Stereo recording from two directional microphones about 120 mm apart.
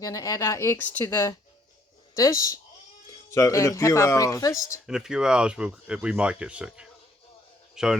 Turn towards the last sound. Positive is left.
turn(degrees=-5)  # may be behind; listen again after turning